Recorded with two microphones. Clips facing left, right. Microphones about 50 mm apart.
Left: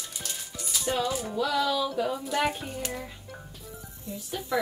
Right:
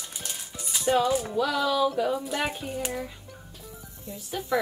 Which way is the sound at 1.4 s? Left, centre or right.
Centre.